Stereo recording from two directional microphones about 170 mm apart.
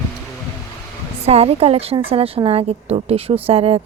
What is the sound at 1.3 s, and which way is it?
A woman's voice, 35° right (ahead or behind).